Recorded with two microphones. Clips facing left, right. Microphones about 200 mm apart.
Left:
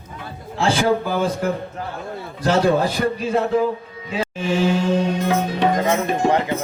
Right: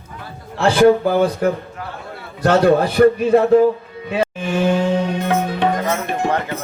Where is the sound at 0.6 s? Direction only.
60° right (ahead or behind).